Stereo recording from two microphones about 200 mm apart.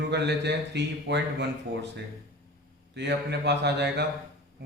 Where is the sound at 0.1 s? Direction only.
60° right (ahead or behind).